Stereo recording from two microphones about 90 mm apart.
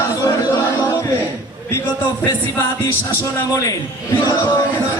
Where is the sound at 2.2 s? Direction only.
35° left (ahead or behind).